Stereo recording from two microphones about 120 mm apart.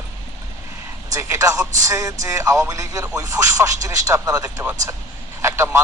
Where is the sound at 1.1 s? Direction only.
25° right (ahead or behind).